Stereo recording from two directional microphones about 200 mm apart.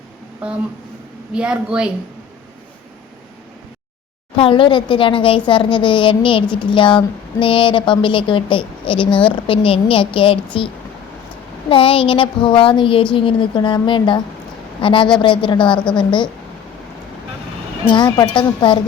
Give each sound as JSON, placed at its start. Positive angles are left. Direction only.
{"t": 0.4, "sound": "a woman's voice", "side_deg": -5}
{"t": 4.4, "sound": "speech", "side_deg": 25}
{"t": 11.7, "sound": "speech", "side_deg": 25}
{"t": 17.9, "sound": "speech", "side_deg": 20}